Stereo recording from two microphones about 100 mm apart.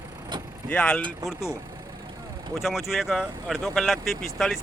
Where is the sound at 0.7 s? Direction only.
10° left (ahead or behind).